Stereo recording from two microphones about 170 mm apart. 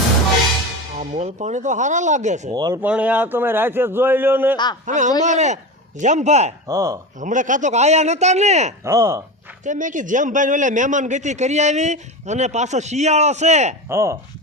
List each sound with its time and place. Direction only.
0.9 s a man's voice: 40° right (ahead or behind)
2.5 s speech: 20° right (ahead or behind)
2.8 s a man's voice: 10° right (ahead or behind)
4.5 s a man's voice: 25° left (ahead or behind)
4.9 s a man's voice: 45° right (ahead or behind)
6.7 s a man's voice: 15° right (ahead or behind)
7.2 s speech: 50° right (ahead or behind)
8.8 s a man's voice: 15° right (ahead or behind)
9.6 s a man's voice: 50° right (ahead or behind)
13.8 s a man's voice: 15° right (ahead or behind)